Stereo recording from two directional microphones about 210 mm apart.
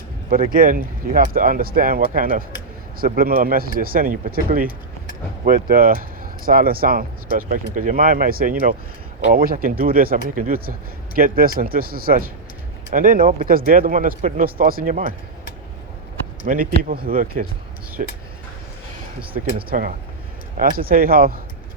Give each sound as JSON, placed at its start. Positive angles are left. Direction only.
{"t": 0.5, "sound": "speech", "side_deg": -40}
{"t": 16.5, "sound": "speech", "side_deg": -45}
{"t": 19.7, "sound": "speech", "side_deg": -40}